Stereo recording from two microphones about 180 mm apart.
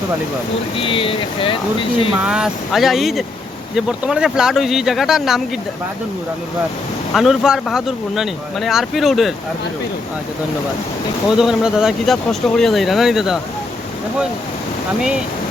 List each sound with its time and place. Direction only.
0.8 s speech: 30° left (ahead or behind)
2.2 s speech: 5° right (ahead or behind)
7.1 s speech: centre (ahead or behind)
11.3 s speech: 5° right (ahead or behind)